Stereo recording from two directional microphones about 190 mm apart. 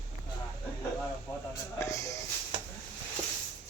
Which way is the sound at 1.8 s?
15° left (ahead or behind).